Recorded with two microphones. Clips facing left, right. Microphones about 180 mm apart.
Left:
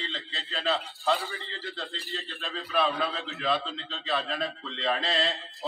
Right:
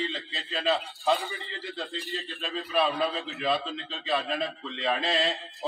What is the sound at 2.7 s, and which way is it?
Speech, centre (ahead or behind).